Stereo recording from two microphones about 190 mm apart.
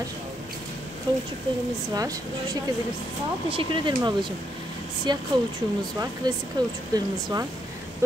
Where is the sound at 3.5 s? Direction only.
30° right (ahead or behind).